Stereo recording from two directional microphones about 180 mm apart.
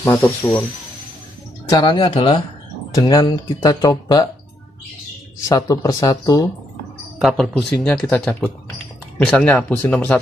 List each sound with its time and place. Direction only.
0.0 s speech: 15° left (ahead or behind)
1.7 s speech: 25° left (ahead or behind)
5.5 s speech: 20° left (ahead or behind)
7.2 s speech: centre (ahead or behind)